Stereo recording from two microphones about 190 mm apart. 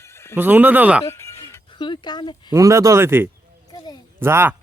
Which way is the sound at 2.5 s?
15° right (ahead or behind).